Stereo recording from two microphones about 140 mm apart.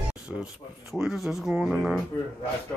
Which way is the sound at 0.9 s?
Centre (ahead or behind).